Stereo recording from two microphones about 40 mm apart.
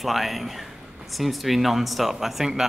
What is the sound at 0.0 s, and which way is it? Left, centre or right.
A man's voice, centre.